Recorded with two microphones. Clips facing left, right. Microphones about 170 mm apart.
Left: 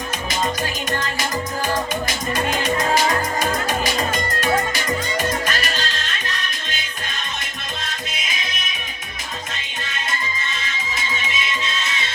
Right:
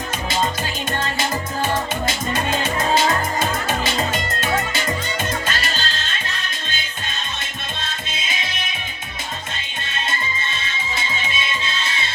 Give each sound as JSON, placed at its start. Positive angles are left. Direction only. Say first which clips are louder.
{"t": 0.9, "sound": "music", "louder": "right 3 dB", "side_deg": -30}
{"t": 10.6, "sound": "music", "louder": "right 1 dB", "side_deg": -30}